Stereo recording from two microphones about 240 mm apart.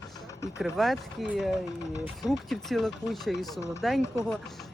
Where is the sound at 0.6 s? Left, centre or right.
Centre.